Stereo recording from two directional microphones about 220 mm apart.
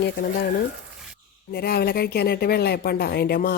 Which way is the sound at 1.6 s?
45° left (ahead or behind).